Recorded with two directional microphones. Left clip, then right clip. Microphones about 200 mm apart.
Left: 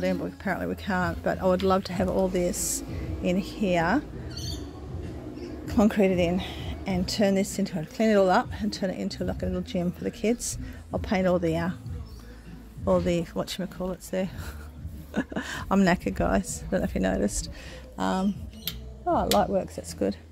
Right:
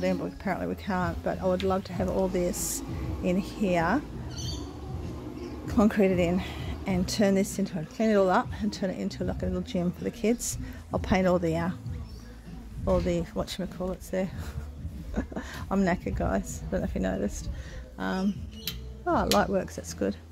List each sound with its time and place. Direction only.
0.0 s speech: 10° left (ahead or behind)
2.1 s speech: 10° left (ahead or behind)
5.7 s speech: 10° left (ahead or behind)
12.8 s speech: 15° left (ahead or behind)
15.1 s speech: 25° left (ahead or behind)
19.3 s speech: centre (ahead or behind)